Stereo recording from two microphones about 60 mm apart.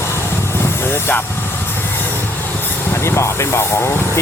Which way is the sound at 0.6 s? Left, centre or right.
Left.